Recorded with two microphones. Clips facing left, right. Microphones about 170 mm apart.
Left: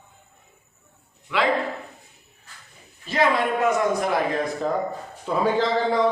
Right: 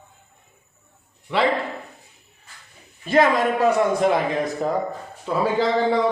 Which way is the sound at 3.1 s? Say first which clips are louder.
Right 4 dB; 50° right (ahead or behind).